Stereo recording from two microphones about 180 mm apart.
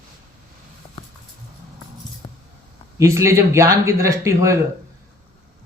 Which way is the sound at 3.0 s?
15° right (ahead or behind).